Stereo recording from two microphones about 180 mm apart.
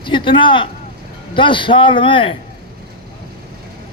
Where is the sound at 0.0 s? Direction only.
25° left (ahead or behind).